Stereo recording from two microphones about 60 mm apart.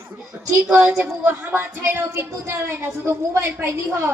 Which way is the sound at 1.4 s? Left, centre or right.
Right.